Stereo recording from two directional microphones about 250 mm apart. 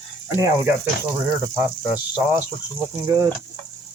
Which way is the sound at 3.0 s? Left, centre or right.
Centre.